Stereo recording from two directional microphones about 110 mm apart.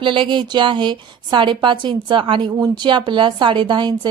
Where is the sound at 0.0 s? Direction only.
50° right (ahead or behind).